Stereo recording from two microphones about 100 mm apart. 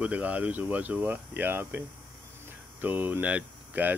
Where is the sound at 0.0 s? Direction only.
15° right (ahead or behind).